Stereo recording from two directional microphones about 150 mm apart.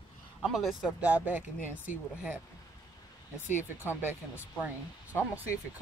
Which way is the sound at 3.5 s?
15° left (ahead or behind).